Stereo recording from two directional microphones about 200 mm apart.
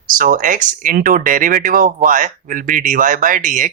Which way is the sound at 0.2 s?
40° right (ahead or behind).